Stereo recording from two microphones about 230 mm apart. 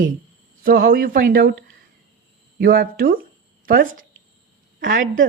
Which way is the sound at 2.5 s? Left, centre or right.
Right.